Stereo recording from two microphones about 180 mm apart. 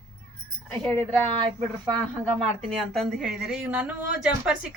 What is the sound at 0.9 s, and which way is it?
Speech, 25° right (ahead or behind).